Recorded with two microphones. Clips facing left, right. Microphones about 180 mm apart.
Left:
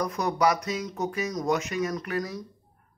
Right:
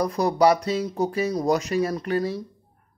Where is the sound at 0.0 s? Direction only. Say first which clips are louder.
Right 5 dB; 30° right (ahead or behind).